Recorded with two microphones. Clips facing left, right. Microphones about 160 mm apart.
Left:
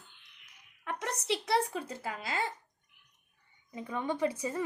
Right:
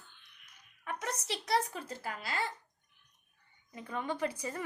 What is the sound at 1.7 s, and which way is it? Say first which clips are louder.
Speech: left 3 dB; 20° left (ahead or behind).